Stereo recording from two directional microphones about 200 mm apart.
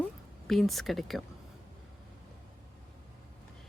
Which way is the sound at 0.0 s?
Centre (ahead or behind).